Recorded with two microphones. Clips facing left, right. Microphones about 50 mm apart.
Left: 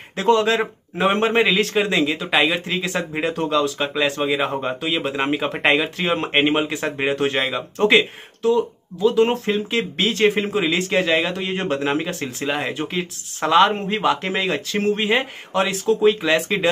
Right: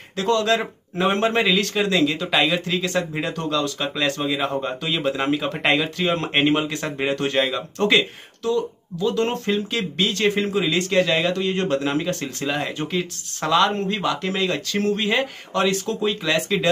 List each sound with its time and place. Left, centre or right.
0.2 s a man's voice: centre
16.1 s a man's voice: left